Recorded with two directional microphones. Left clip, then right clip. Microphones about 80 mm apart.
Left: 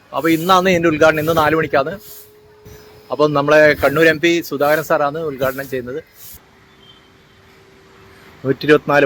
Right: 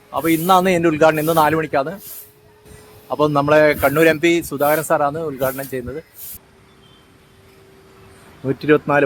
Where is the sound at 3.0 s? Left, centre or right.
Right.